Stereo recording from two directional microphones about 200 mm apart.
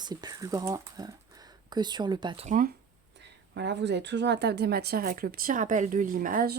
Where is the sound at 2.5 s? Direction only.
40° right (ahead or behind).